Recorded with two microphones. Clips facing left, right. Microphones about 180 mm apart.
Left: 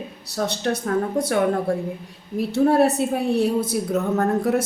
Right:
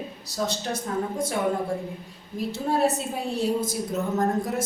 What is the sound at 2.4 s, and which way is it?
A woman's voice, 65° left (ahead or behind).